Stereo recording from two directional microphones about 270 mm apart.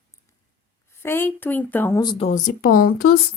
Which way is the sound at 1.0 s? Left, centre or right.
Centre.